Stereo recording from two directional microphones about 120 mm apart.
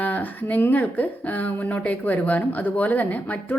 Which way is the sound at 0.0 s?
15° left (ahead or behind).